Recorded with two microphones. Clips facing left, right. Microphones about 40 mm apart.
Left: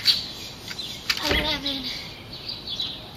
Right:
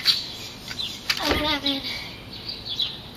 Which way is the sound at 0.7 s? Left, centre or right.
Centre.